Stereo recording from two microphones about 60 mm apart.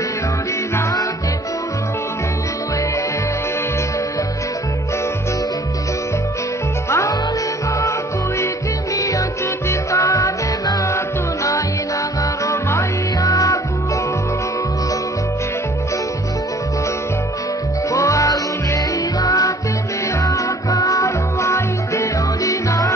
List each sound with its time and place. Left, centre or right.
6.9 s music: left
8.9 s music: left
13.2 s music: left
17.9 s music: left